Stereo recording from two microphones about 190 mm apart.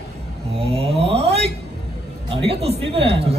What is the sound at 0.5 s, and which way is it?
Speech, 30° right (ahead or behind).